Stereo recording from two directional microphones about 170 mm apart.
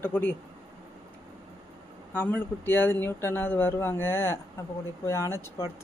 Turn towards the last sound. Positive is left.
turn(degrees=15)  # may be behind; listen again after turning